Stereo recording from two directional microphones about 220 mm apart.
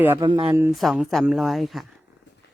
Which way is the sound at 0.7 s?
Centre (ahead or behind).